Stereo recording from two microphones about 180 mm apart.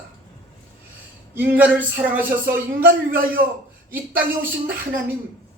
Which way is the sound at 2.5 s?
55° right (ahead or behind).